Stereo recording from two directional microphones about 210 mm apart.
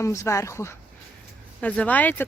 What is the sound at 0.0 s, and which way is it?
Speech, 15° left (ahead or behind).